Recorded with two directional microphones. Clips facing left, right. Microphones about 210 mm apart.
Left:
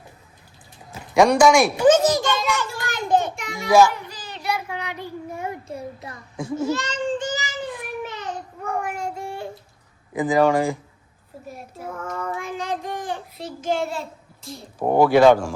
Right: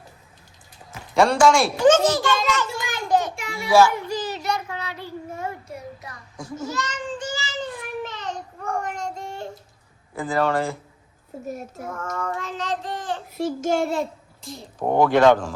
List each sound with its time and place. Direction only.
1.1 s a child's voice: 15° left (ahead or behind)
3.1 s child singing: 25° left (ahead or behind)
5.7 s child singing: 30° left (ahead or behind); by 9.5 s 10° left (ahead or behind)
10.1 s speech: 15° left (ahead or behind)
11.9 s child singing: 10° left (ahead or behind)
13.6 s a sound: 45° right (ahead or behind)
14.4 s speech: 5° left (ahead or behind)